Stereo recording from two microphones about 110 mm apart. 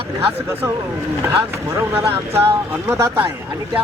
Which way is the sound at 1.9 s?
25° right (ahead or behind).